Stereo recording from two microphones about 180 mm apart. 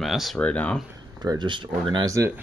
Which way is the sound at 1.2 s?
25° right (ahead or behind).